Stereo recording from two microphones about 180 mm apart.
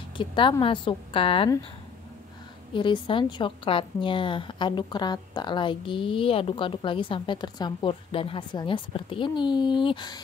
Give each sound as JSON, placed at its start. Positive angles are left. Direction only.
{"t": 0.2, "sound": "a woman's voice", "side_deg": 25}
{"t": 2.7, "sound": "a woman's voice", "side_deg": 25}